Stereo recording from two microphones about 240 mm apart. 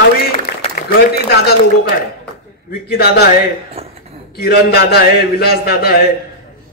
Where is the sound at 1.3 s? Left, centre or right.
Left.